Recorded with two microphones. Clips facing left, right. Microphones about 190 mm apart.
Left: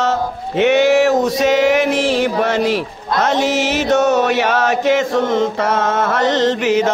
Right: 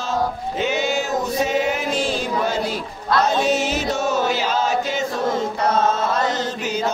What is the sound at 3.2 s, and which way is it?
Music, 90° left.